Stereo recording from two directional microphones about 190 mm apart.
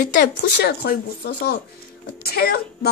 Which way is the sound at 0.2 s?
55° left (ahead or behind).